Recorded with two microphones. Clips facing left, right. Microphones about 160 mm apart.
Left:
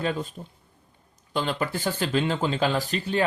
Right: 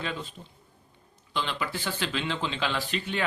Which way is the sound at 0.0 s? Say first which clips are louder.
Left 7 dB; 45° left (ahead or behind).